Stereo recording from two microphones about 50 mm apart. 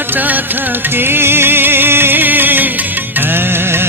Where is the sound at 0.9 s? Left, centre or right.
Right.